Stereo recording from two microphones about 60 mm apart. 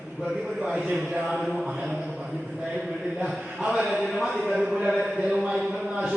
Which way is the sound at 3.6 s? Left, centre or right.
Centre.